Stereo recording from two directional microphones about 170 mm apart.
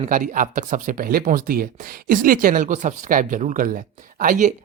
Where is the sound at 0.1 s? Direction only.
50° right (ahead or behind).